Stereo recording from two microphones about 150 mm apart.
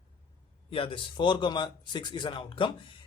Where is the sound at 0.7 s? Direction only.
35° left (ahead or behind).